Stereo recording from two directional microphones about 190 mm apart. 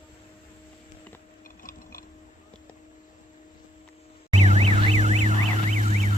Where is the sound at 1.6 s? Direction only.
50° left (ahead or behind).